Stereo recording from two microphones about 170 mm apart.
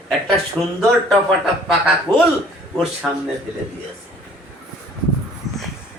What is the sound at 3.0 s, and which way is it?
Speech, centre (ahead or behind).